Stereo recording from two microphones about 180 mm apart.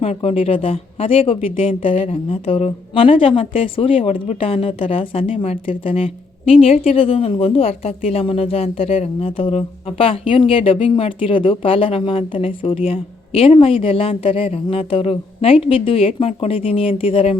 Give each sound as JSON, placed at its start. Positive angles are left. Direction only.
{"t": 0.0, "sound": "a woman's voice", "side_deg": 35}